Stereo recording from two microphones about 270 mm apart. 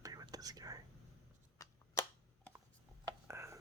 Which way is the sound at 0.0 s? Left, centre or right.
Centre.